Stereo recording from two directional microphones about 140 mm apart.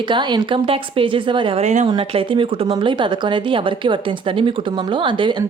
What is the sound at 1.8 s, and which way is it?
Speech, 35° right (ahead or behind).